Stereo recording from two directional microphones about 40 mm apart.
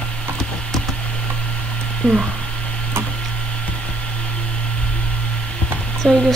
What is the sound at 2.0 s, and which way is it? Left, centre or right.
Speech, left.